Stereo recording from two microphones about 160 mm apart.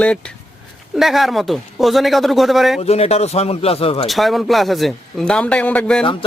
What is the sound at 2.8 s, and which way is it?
Speech, 40° left (ahead or behind).